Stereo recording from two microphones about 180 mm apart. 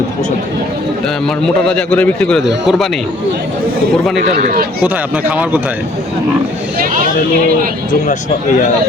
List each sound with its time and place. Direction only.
1.6 s a man's voice: 5° left (ahead or behind)
4.3 s speech: 55° right (ahead or behind)
4.8 s a man's voice: 5° right (ahead or behind)